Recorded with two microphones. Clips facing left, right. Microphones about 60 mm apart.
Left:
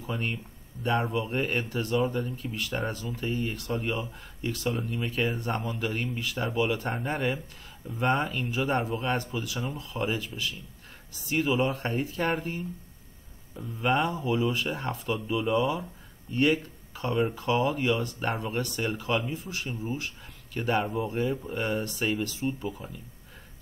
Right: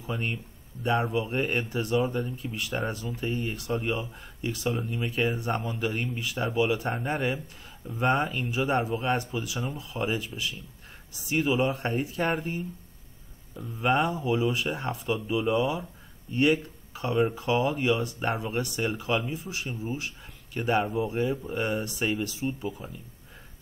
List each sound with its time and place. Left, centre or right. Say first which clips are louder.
0.0 s speech: even; centre
1.7 s speech: right 1 dB; centre
2.0 s speech: even; centre
16.9 s speech: right 2 dB; centre
19.3 s speech: even; centre
19.7 s speech: left 1 dB; centre